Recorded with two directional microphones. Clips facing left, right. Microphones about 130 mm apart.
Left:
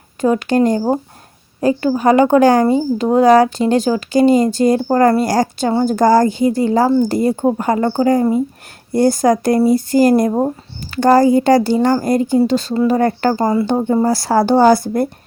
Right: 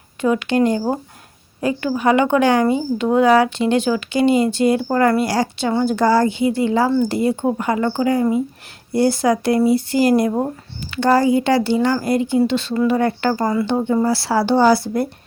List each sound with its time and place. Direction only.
0.2 s a woman's voice: 40° left (ahead or behind)
13.3 s speech: 25° left (ahead or behind)
13.7 s speech: 35° left (ahead or behind)